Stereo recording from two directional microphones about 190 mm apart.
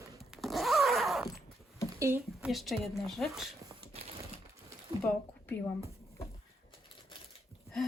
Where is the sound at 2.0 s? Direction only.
10° right (ahead or behind).